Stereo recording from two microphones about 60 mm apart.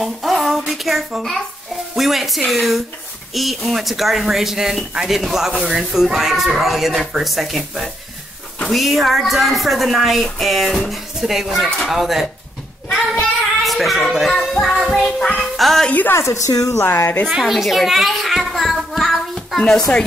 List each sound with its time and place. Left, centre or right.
0.0 s a child's voice: centre
13.7 s speech: centre
14.3 s music: centre
14.8 s music: centre
15.3 s speech: centre
16.1 s a woman's voice: left
16.8 s a woman's voice: left
17.4 s a child's voice: centre
19.3 s a sound: centre